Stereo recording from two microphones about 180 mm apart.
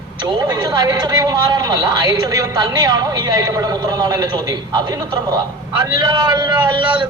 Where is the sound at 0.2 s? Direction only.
20° right (ahead or behind).